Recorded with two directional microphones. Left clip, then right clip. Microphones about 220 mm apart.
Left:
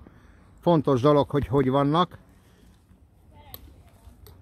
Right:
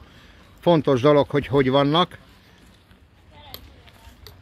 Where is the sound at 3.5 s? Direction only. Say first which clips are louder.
Right 8 dB; 50° left (ahead or behind).